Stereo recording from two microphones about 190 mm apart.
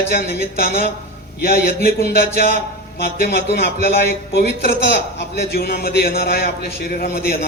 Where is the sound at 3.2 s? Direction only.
60° left (ahead or behind).